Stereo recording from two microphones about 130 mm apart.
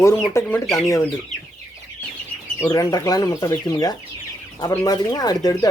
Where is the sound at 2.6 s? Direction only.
30° left (ahead or behind).